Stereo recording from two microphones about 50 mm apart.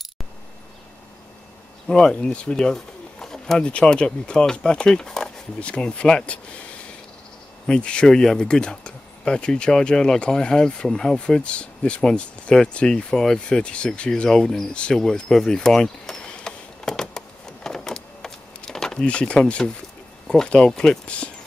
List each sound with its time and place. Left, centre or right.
1.9 s speech: centre
7.6 s speech: centre
13.6 s speech: left
14.7 s speech: centre
15.0 s a sound: centre
19.0 s speech: left